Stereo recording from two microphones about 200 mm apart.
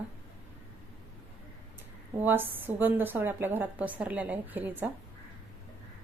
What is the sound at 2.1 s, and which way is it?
A woman's voice, 10° right (ahead or behind).